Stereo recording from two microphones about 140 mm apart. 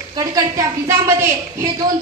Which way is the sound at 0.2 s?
25° right (ahead or behind).